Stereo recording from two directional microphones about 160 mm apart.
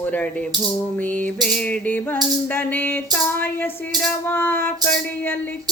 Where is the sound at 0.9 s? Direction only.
10° left (ahead or behind).